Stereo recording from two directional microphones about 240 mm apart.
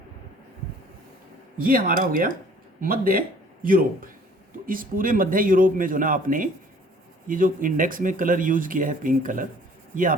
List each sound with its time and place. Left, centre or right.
1.5 s a man's voice: right